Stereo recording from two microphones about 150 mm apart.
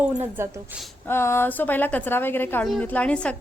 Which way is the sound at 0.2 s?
15° right (ahead or behind).